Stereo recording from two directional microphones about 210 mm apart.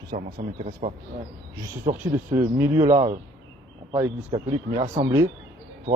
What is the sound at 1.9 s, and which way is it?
Speech, 15° right (ahead or behind).